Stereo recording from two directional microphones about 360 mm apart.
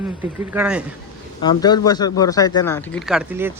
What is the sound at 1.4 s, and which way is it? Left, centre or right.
Speech, centre.